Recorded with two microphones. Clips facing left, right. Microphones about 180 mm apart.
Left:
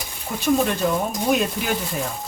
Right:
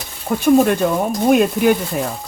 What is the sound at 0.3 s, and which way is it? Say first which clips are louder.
Speech: right 10 dB; 40° right (ahead or behind).